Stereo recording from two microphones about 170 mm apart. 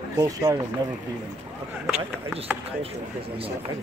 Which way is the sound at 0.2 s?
20° right (ahead or behind).